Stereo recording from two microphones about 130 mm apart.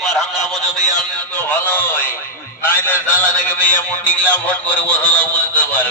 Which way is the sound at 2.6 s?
15° left (ahead or behind).